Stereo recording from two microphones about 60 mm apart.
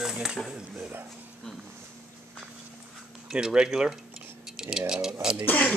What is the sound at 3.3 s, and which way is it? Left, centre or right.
Speech, centre.